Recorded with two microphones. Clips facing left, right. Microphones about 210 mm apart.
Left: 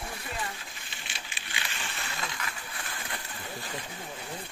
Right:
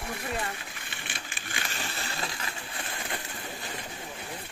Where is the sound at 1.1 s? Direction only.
50° right (ahead or behind).